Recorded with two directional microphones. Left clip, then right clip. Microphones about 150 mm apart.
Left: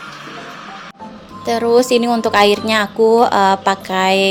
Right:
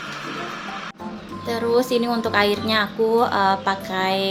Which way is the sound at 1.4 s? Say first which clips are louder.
Left 7 dB; 50° left (ahead or behind).